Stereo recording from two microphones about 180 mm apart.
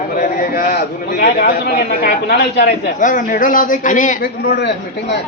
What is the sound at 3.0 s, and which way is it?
A man's voice, 45° left (ahead or behind).